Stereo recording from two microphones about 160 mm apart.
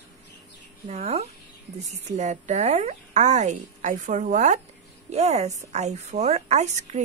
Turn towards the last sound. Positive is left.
turn(degrees=-45)  # may be behind; listen again after turning